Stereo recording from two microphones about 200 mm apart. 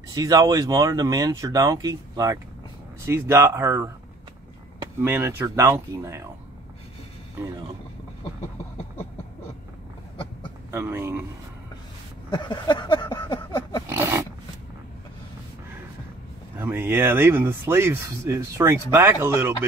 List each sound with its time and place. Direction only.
0.1 s speech: 20° right (ahead or behind)
5.0 s speech: 10° right (ahead or behind)
10.7 s speech: 10° right (ahead or behind)
12.3 s a sound: 25° left (ahead or behind)
13.8 s dog: 10° right (ahead or behind)
16.5 s speech: 10° right (ahead or behind)